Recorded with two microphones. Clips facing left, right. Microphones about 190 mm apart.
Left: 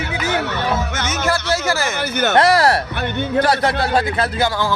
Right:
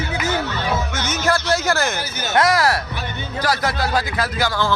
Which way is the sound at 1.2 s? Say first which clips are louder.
Right 1 dB; 5° left (ahead or behind).